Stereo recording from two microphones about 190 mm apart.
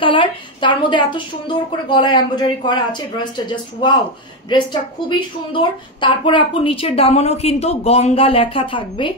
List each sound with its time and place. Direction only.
0.0 s a woman's voice: 25° left (ahead or behind)
5.5 s a woman's voice: 25° left (ahead or behind)